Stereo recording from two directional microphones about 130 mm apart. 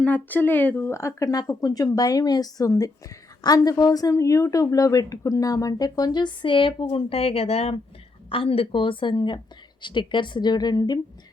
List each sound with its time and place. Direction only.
0.0 s a woman's voice: 10° left (ahead or behind); by 11.0 s 30° left (ahead or behind)